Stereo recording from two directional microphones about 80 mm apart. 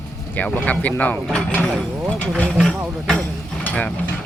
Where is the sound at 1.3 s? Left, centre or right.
Centre.